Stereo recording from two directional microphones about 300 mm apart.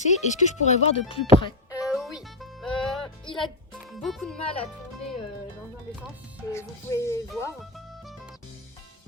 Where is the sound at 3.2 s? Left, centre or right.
Centre.